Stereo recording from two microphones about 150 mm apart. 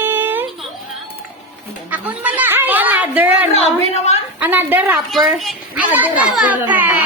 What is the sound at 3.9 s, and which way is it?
Speech, 45° left (ahead or behind).